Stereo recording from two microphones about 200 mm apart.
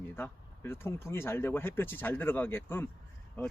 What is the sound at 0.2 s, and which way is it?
A man's voice, 10° left (ahead or behind).